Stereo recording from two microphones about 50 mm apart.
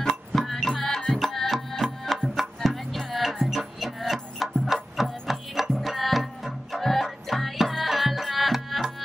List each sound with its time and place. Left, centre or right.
0.0 s music: centre